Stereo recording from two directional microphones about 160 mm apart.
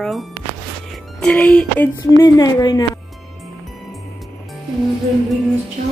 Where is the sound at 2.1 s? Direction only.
25° left (ahead or behind).